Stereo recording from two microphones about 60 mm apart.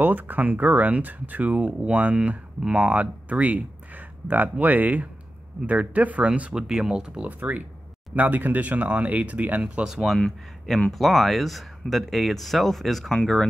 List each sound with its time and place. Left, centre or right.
0.0 s speech: right; by 7.2 s centre
7.3 s speech: right
9.8 s speech: centre
10.1 s speech: centre